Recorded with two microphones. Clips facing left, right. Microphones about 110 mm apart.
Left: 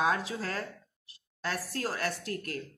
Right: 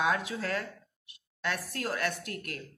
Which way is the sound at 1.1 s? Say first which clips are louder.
Right 1 dB; 35° left (ahead or behind).